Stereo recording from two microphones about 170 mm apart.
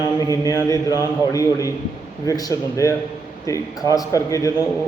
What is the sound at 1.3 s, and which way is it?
A man's voice, 20° left (ahead or behind).